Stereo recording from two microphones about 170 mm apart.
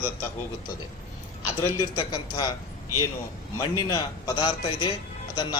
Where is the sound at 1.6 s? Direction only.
20° left (ahead or behind).